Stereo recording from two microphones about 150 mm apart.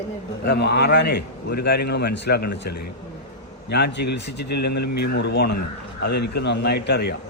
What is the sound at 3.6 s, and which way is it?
A man's voice, 90° left.